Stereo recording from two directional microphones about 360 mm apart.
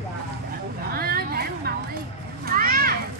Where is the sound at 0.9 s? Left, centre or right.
Right.